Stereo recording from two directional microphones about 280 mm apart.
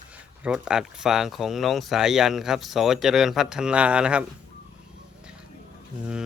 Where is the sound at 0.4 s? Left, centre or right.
Centre.